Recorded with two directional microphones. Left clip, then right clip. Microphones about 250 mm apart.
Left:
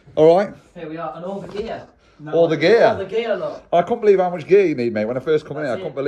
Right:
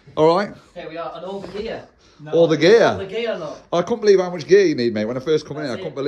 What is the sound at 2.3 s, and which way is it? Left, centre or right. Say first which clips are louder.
Speech: right 1 dB; right.